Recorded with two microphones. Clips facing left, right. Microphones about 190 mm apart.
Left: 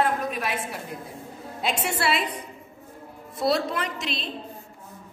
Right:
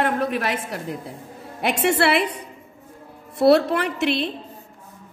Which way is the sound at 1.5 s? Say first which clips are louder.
Right 8 dB; 60° right (ahead or behind).